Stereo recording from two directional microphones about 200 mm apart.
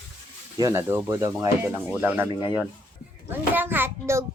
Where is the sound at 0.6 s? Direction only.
15° right (ahead or behind).